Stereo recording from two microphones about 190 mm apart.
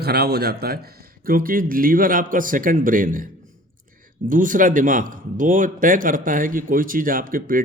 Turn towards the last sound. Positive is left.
turn(degrees=-45)  # may be behind; listen again after turning